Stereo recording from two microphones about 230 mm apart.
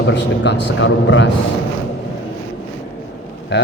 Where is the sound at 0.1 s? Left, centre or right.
Left.